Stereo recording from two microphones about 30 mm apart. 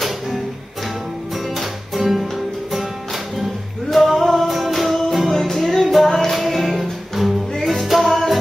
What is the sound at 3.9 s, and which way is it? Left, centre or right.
Music, centre.